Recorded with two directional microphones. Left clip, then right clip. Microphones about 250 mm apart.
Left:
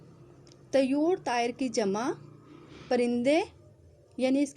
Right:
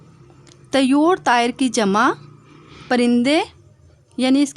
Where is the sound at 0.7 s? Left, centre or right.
Right.